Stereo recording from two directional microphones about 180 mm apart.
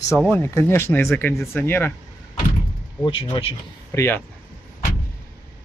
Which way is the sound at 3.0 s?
30° left (ahead or behind).